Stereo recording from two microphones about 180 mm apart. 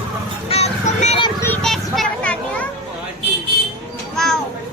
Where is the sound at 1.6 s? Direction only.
Centre (ahead or behind).